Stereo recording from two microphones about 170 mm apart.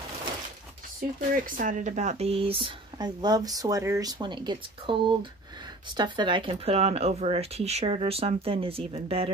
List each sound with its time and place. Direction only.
1.3 s speech: 55° right (ahead or behind); by 9.3 s 35° right (ahead or behind)